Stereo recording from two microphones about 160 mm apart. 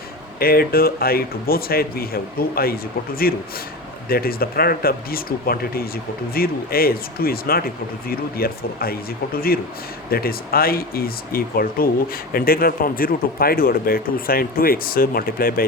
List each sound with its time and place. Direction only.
0.3 s speech: 70° left (ahead or behind)